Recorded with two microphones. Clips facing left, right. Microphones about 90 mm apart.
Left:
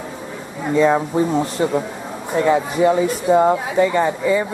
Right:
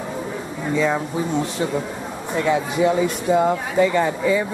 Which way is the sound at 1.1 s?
Centre (ahead or behind).